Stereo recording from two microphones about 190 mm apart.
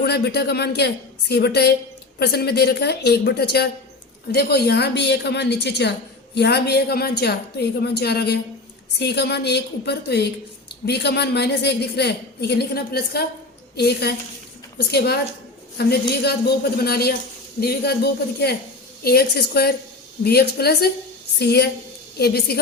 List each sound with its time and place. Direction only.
0.0 s a woman's voice: 60° left (ahead or behind)